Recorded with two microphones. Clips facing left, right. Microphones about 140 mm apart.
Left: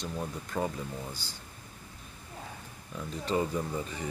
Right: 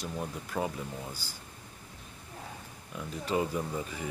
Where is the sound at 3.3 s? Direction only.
10° right (ahead or behind).